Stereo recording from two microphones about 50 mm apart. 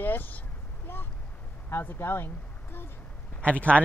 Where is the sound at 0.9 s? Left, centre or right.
Left.